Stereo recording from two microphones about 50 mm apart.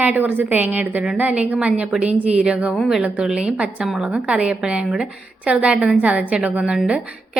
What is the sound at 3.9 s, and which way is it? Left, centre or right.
A woman's voice, centre.